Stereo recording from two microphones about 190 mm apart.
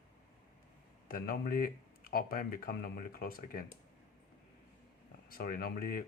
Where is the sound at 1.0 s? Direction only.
50° left (ahead or behind).